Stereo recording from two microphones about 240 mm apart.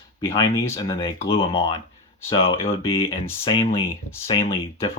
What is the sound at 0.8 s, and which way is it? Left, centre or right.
Speech, left.